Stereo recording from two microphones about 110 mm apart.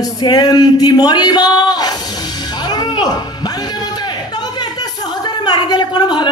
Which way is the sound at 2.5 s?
40° left (ahead or behind).